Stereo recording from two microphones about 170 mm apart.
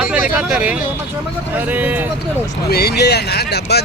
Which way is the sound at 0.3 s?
5° right (ahead or behind).